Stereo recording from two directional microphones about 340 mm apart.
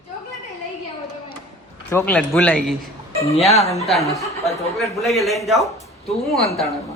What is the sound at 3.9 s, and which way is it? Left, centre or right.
A man's voice, centre.